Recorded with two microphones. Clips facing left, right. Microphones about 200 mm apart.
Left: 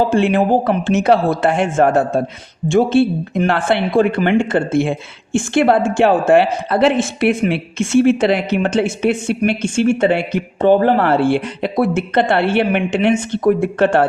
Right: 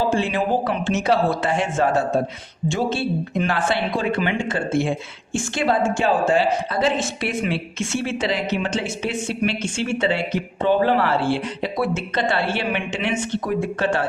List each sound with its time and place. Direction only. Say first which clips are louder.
0.1 s speech: left 7 dB; 55° left (ahead or behind)